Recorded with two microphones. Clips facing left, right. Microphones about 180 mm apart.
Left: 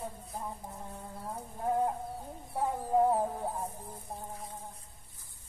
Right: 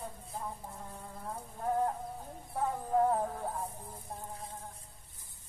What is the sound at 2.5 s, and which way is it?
Music, 10° left (ahead or behind).